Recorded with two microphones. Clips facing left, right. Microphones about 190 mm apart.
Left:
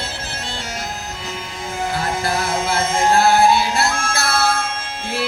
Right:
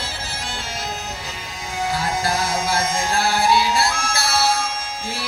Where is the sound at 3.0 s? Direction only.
55° left (ahead or behind).